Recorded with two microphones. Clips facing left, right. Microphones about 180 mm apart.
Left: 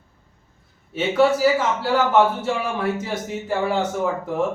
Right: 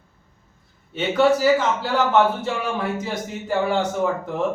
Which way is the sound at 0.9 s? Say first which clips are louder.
Even; 5° left (ahead or behind).